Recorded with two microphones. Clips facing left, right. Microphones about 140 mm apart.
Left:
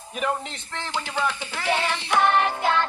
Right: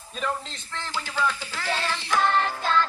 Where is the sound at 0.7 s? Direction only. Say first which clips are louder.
Left 1 dB; 20° left (ahead or behind).